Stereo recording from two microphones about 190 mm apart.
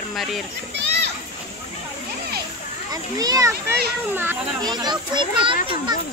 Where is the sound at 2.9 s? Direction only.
20° right (ahead or behind).